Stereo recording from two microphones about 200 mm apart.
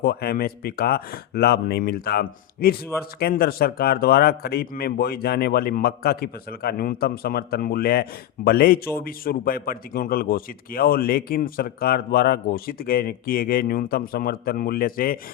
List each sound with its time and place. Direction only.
0.0 s speech: 50° left (ahead or behind)